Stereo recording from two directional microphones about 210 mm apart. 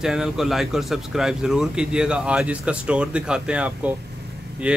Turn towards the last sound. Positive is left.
turn(degrees=-5)  # may be behind; listen again after turning